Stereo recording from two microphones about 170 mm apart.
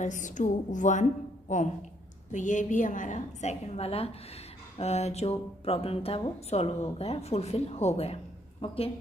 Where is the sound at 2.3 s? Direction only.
45° left (ahead or behind).